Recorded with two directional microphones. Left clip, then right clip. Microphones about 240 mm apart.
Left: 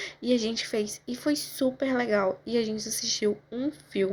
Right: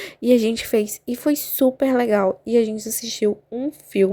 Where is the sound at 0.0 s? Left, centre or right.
Right.